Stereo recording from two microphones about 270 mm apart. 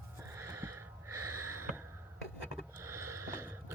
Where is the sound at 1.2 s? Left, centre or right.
Right.